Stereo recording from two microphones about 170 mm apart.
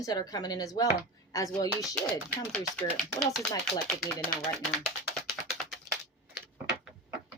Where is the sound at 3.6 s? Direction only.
Centre (ahead or behind).